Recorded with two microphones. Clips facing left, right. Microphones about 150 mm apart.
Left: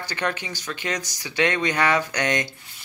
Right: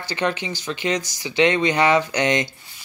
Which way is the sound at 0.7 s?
25° right (ahead or behind).